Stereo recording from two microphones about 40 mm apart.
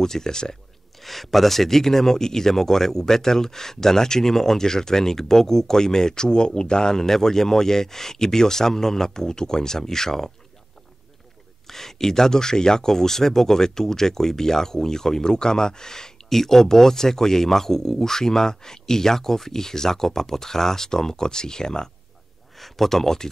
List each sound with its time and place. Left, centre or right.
0.0 s speech: centre
1.0 s speech: centre
11.6 s speech: centre
22.6 s speech: centre